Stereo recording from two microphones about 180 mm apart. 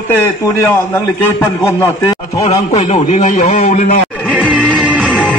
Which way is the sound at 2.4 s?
35° left (ahead or behind).